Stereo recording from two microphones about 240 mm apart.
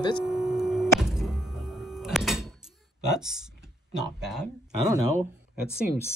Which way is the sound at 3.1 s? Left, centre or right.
Centre.